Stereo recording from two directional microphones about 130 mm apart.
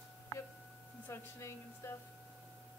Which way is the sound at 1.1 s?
20° left (ahead or behind).